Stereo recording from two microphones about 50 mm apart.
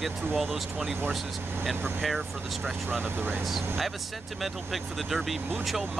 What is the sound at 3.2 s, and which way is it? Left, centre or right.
Speech, right.